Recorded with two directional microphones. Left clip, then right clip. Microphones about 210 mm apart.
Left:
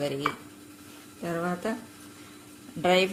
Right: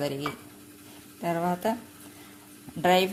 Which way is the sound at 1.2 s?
35° right (ahead or behind).